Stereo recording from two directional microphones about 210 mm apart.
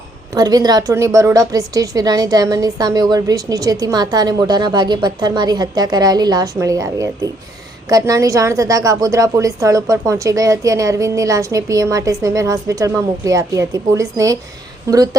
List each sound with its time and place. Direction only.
0.3 s a woman's voice: 20° right (ahead or behind)